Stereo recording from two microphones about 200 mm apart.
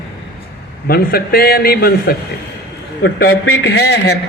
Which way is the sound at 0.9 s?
50° left (ahead or behind).